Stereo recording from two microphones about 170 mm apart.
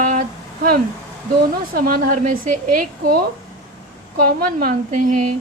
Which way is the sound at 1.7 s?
55° right (ahead or behind).